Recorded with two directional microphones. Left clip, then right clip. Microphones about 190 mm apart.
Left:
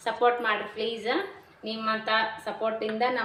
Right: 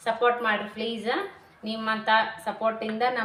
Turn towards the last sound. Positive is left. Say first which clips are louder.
# even
turn(degrees=10)  # may be behind; listen again after turning